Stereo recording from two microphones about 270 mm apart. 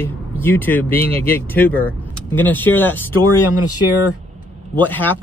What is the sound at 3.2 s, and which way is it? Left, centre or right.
Speech, left.